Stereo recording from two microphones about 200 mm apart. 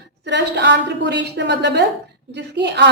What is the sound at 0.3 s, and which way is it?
A woman's voice, 60° right (ahead or behind).